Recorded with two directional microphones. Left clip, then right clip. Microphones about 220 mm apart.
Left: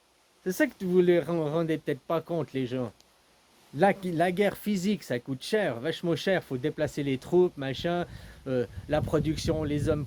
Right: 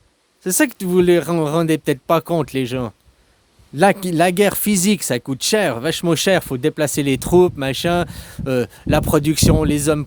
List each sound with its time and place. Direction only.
0.4 s speech: 50° right (ahead or behind)